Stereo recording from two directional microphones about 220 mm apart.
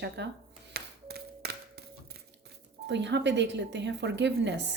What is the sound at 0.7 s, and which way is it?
Tap, 45° right (ahead or behind).